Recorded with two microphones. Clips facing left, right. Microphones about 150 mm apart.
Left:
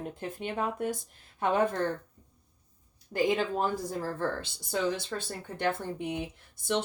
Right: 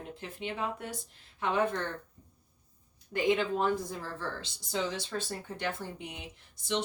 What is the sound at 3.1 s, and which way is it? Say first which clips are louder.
Speech: left 1 dB; 40° left (ahead or behind).